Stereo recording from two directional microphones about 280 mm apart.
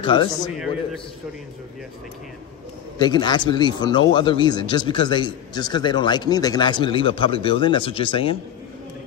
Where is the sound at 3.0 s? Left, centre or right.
Centre.